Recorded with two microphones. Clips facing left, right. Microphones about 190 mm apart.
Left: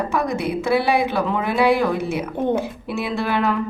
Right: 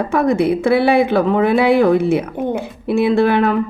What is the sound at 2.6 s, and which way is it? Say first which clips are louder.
Speech: right 9 dB; 55° right (ahead or behind).